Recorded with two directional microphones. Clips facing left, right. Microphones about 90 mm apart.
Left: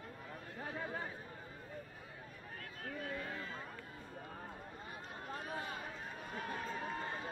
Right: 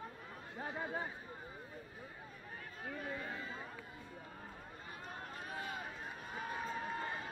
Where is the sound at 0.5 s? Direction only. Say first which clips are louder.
Right 2 dB; 20° right (ahead or behind).